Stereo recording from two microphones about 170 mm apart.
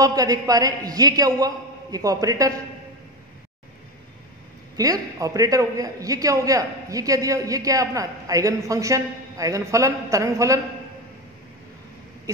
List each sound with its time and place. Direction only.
0.0 s a man's voice: 20° right (ahead or behind)
4.7 s a man's voice: 20° right (ahead or behind)